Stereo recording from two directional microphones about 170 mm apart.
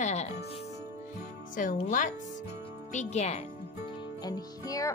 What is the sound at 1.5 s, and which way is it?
Speech, 50° left (ahead or behind).